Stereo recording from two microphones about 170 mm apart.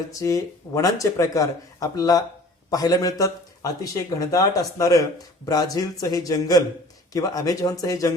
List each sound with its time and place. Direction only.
0.1 s a man's voice: 20° left (ahead or behind)